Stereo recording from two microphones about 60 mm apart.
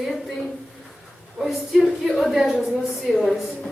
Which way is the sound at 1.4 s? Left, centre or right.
Centre.